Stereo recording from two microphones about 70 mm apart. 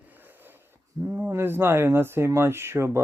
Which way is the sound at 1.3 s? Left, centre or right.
Right.